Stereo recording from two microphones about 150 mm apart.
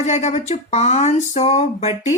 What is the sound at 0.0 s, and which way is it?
A woman's voice, 50° left (ahead or behind).